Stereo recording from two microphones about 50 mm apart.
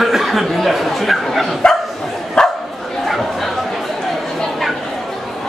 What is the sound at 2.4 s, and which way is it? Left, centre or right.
Bow-wow, centre.